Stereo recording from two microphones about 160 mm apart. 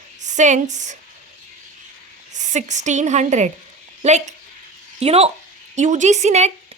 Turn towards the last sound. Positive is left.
turn(degrees=-45)  # may be behind; listen again after turning